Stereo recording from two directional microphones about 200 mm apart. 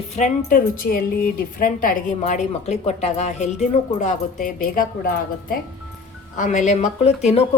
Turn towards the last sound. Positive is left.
turn(degrees=30)  # may be behind; listen again after turning